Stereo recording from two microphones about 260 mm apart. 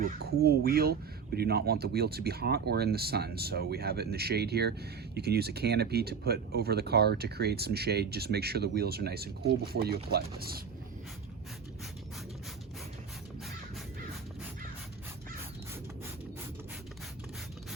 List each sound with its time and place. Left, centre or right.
0.0 s speech: right